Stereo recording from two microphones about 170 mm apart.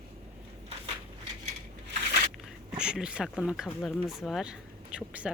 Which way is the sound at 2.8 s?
5° right (ahead or behind).